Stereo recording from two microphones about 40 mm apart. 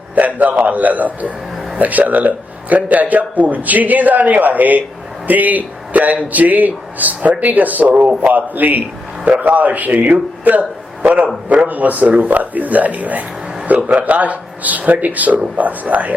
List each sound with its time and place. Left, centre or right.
0.2 s a man's voice: right